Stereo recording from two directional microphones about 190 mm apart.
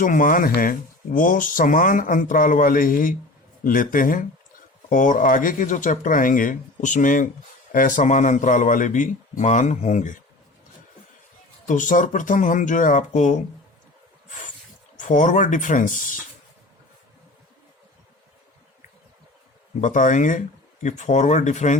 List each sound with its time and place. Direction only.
0.0 s speech: 45° left (ahead or behind)
11.7 s speech: 45° left (ahead or behind)
14.3 s a sound: 40° left (ahead or behind)
14.9 s speech: 40° left (ahead or behind)
19.8 s speech: 40° left (ahead or behind)